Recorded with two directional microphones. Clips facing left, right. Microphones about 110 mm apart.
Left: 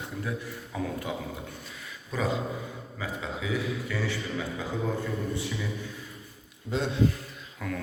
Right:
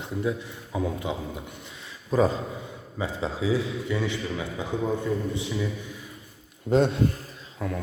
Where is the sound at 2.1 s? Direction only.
40° right (ahead or behind).